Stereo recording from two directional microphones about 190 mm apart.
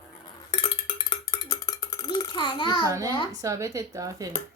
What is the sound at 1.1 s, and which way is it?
Cowbell, 20° left (ahead or behind).